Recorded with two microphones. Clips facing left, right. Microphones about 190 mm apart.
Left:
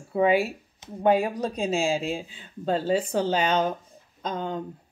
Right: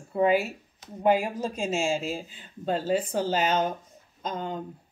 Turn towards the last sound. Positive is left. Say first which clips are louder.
# left 2 dB
turn(degrees=-5)  # may be behind; listen again after turning